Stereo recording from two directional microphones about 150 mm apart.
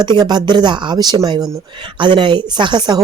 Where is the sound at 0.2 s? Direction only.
30° right (ahead or behind).